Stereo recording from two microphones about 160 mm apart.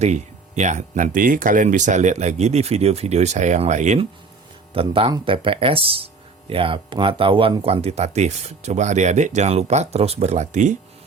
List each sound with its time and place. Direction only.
0.0 s speech: 45° right (ahead or behind)
4.7 s speech: 35° right (ahead or behind)